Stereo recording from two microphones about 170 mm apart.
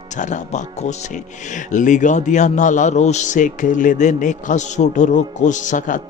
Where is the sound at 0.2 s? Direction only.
45° left (ahead or behind).